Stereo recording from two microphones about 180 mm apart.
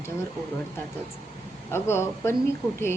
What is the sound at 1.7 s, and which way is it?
Speech, 15° left (ahead or behind).